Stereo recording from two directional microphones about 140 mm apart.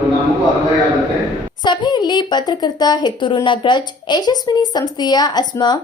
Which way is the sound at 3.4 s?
35° left (ahead or behind).